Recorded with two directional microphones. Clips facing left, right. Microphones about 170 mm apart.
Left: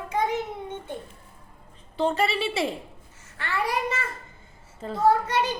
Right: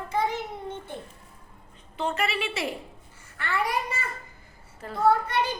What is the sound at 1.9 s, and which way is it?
Speech, 30° left (ahead or behind).